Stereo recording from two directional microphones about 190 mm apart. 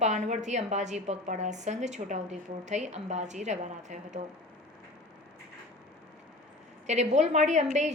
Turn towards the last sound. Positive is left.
turn(degrees=-35)  # may be behind; listen again after turning